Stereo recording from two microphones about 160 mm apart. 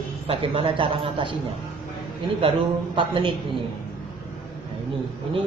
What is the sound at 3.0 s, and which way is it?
Speech, 30° right (ahead or behind).